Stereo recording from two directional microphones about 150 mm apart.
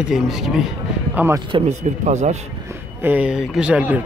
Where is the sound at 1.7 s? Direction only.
50° right (ahead or behind).